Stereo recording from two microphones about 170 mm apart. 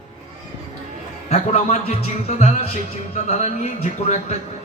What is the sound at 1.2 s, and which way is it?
Speech, 40° left (ahead or behind).